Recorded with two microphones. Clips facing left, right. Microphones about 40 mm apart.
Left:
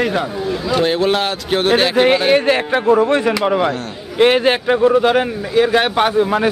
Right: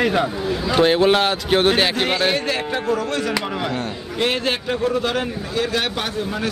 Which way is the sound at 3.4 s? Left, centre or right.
Centre.